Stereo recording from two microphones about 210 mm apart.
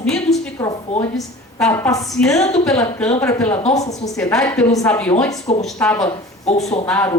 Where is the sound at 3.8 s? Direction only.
30° left (ahead or behind).